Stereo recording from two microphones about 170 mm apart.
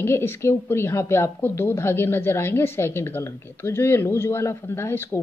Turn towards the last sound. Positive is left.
turn(degrees=15)  # may be behind; listen again after turning